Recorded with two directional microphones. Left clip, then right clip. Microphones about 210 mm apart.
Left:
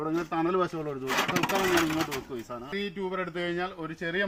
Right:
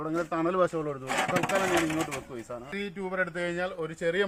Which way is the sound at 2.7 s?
15° right (ahead or behind).